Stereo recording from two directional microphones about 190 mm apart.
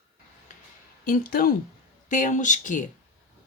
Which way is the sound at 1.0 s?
50° left (ahead or behind).